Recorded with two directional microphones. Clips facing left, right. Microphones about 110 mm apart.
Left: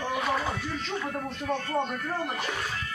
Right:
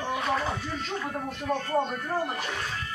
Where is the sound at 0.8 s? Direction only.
10° right (ahead or behind).